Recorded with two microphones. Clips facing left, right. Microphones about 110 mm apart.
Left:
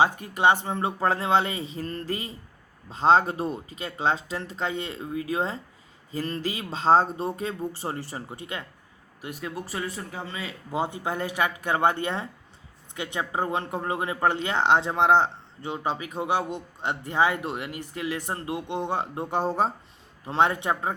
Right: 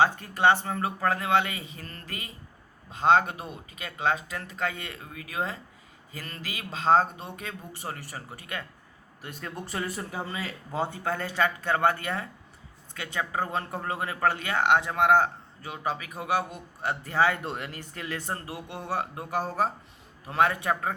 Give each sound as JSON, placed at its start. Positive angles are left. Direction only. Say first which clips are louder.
{"t": 0.0, "sound": "speech", "louder": "left 1 dB", "side_deg": 15}
{"t": 9.2, "sound": "speech", "louder": "left 4 dB", "side_deg": 10}
{"t": 10.7, "sound": "speech", "louder": "left 2 dB", "side_deg": 15}